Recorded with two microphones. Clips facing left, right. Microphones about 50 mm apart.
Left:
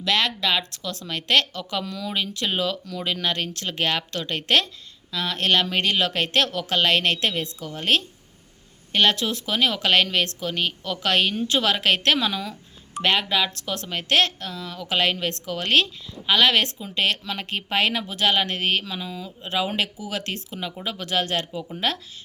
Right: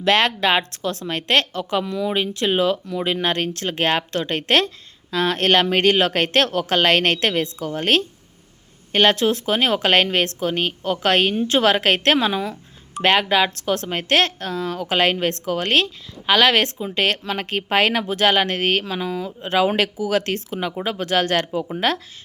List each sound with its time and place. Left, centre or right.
0.0 s a woman's voice: right